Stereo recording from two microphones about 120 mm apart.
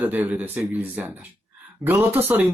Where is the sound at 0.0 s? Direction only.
15° right (ahead or behind).